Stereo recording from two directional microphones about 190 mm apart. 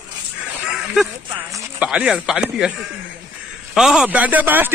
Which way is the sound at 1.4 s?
10° right (ahead or behind).